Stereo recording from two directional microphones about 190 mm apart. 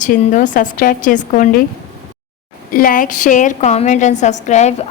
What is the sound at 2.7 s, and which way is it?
A woman's voice, 50° left (ahead or behind).